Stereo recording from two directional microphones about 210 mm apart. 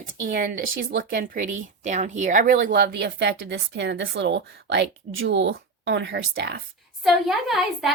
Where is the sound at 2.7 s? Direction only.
55° right (ahead or behind).